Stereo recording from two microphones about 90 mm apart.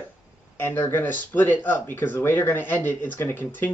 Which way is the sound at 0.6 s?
30° left (ahead or behind).